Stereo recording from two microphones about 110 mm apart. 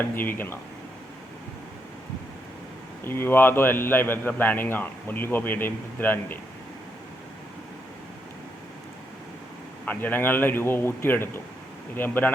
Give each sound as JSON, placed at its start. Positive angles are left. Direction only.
{"t": 0.0, "sound": "a man's voice", "side_deg": 20}
{"t": 3.0, "sound": "a man's voice", "side_deg": 20}
{"t": 9.8, "sound": "a man's voice", "side_deg": 15}